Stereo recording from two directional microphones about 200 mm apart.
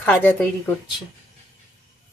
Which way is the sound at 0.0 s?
10° left (ahead or behind).